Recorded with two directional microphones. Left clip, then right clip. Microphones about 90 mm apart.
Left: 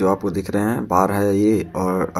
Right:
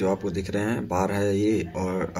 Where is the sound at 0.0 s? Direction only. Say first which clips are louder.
Left 6 dB; 35° left (ahead or behind).